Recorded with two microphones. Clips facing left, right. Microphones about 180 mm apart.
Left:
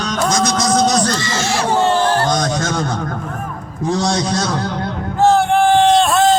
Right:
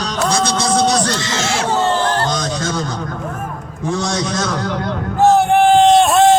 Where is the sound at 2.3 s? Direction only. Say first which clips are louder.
Left 2 dB; 50° left (ahead or behind).